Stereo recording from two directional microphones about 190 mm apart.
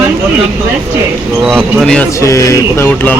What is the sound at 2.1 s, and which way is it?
Speech, 15° left (ahead or behind).